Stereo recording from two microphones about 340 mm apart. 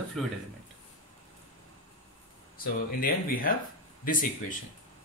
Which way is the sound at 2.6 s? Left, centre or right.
Left.